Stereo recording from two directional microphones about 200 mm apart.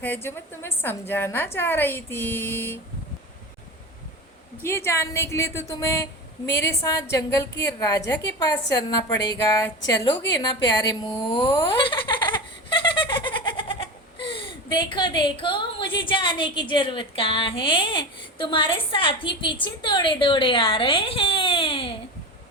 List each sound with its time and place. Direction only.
0.0 s speech: 10° left (ahead or behind)
4.6 s speech: 15° left (ahead or behind)
6.4 s a woman's voice: 60° left (ahead or behind)
6.8 s a woman's voice: 15° left (ahead or behind)
11.8 s giggle: 25° left (ahead or behind)
14.3 s a woman's voice: 25° left (ahead or behind)